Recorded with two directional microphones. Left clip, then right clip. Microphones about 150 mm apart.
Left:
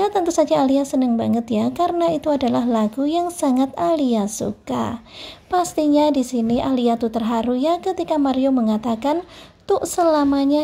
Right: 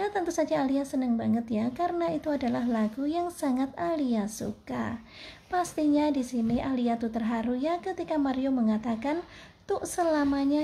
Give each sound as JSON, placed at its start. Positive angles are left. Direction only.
{"t": 0.0, "sound": "speech", "side_deg": 40}